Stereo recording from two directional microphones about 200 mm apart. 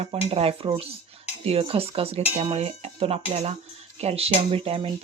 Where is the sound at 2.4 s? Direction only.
30° right (ahead or behind).